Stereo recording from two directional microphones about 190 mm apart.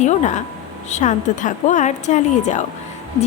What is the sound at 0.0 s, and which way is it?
A woman's voice, 40° left (ahead or behind).